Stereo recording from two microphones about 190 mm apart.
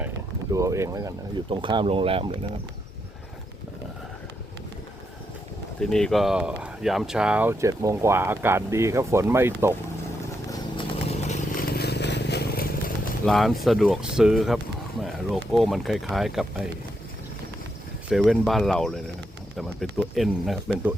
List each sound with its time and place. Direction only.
0.5 s speech: 15° right (ahead or behind)
5.8 s speech: centre (ahead or behind); by 9.7 s 15° right (ahead or behind)
10.5 s a sound: 30° left (ahead or behind)
11.5 s vehicle: 55° left (ahead or behind)
13.2 s speech: centre (ahead or behind)
18.1 s speech: centre (ahead or behind)